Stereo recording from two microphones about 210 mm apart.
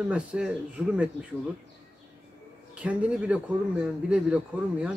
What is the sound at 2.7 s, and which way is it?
A man's voice, 5° right (ahead or behind).